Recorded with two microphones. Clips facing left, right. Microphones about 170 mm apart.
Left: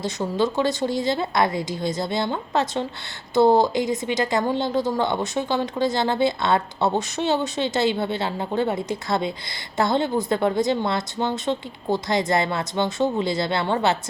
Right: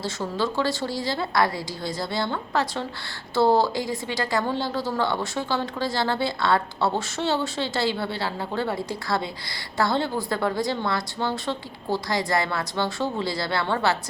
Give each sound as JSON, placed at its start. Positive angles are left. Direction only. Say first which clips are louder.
{"t": 0.0, "sound": "a woman's voice", "louder": "left 4 dB", "side_deg": 20}